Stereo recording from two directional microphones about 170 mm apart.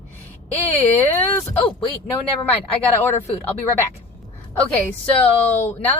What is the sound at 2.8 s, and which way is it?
Speech, 10° left (ahead or behind).